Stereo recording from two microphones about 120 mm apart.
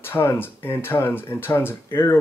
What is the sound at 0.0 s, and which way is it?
Speech, 20° left (ahead or behind).